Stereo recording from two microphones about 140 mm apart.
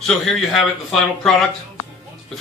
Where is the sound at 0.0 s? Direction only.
5° left (ahead or behind).